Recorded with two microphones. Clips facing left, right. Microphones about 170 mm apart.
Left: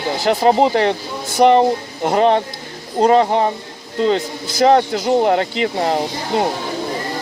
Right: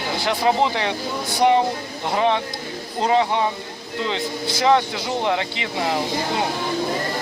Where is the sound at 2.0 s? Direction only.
45° left (ahead or behind).